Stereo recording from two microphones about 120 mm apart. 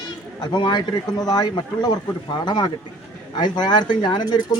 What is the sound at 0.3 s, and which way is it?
Speech, 40° left (ahead or behind).